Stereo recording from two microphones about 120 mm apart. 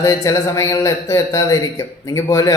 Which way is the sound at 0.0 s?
30° left (ahead or behind).